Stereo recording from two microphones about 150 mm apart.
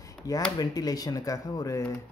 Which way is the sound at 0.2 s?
25° left (ahead or behind).